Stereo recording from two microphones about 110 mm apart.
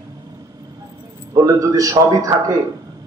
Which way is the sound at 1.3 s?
35° right (ahead or behind).